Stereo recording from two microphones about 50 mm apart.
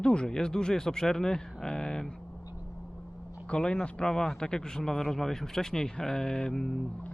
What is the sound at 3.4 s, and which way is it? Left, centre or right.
A man's voice, centre.